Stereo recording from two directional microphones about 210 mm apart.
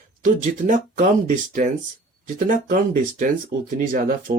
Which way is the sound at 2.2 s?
40° right (ahead or behind).